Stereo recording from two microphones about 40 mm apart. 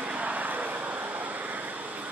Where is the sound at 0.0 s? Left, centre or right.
Right.